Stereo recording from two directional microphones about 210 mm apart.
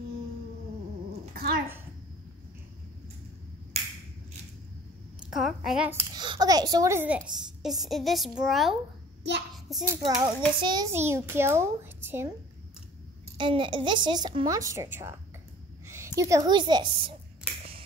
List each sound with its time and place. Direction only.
1.3 s a sound: 45° right (ahead or behind)
5.2 s a sound: centre (ahead or behind)
6.1 s a child's voice: 20° right (ahead or behind); by 8.7 s centre (ahead or behind)
9.8 s a child's voice: 15° right (ahead or behind)
13.4 s speech: 25° right (ahead or behind)
16.2 s speech: 15° right (ahead or behind)